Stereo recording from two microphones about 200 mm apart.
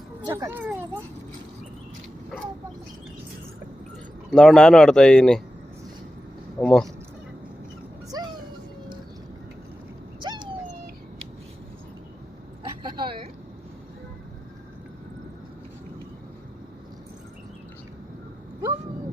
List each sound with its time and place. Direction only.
0.3 s speech: 15° right (ahead or behind)
4.3 s speech: centre (ahead or behind)
6.6 s speech: 5° left (ahead or behind)
8.1 s music: 20° right (ahead or behind)
10.2 s dog: 20° right (ahead or behind)
12.9 s vehicle: 25° right (ahead or behind)